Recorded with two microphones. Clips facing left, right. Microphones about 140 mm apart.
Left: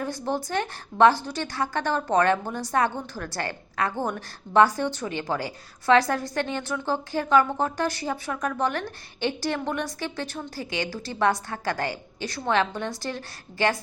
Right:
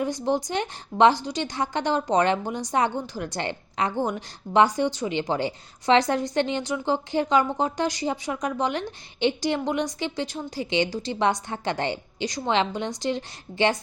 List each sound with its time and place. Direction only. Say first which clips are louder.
0.0 s a woman's voice: right 4 dB; 15° right (ahead or behind)